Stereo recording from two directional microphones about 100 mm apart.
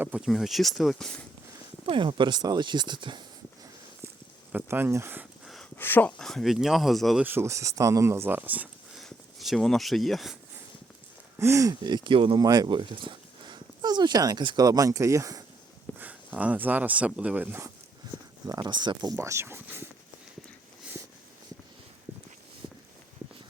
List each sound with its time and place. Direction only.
0.2 s speech: centre (ahead or behind)
1.9 s speech: 55° right (ahead or behind)
4.5 s speech: 25° right (ahead or behind)
5.7 s speech: 20° left (ahead or behind); by 7.2 s centre (ahead or behind)
7.3 s speech: 25° right (ahead or behind)
9.0 s a sound: centre (ahead or behind)
11.3 s speech: 30° right (ahead or behind); by 12.4 s 55° right (ahead or behind)
12.4 s speech: 45° right (ahead or behind)
16.0 s speech: 15° right (ahead or behind)
18.4 s speech: 45° right (ahead or behind)
19.1 s speech: 30° right (ahead or behind)